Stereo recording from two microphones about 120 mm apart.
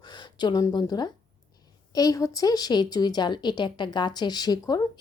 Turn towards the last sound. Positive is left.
turn(degrees=30)  # may be behind; listen again after turning